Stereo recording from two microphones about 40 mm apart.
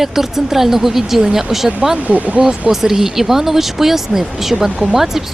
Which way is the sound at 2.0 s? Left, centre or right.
Right.